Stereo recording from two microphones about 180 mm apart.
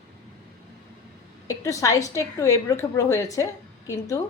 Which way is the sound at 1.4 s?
20° left (ahead or behind).